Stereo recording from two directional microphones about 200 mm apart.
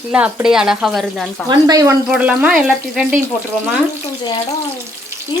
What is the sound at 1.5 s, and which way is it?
Speech, 20° right (ahead or behind).